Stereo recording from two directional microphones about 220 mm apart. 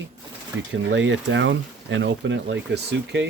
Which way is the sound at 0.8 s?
55° right (ahead or behind).